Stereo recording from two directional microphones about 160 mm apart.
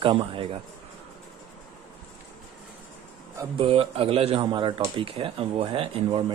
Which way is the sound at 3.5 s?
35° right (ahead or behind).